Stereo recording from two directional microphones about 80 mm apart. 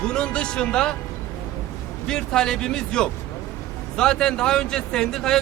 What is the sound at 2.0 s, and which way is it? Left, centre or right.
Speech, centre.